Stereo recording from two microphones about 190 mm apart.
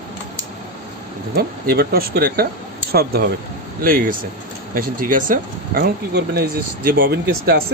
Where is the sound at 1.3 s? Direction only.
50° right (ahead or behind).